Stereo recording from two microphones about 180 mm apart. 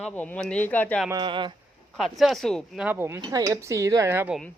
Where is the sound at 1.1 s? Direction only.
25° right (ahead or behind).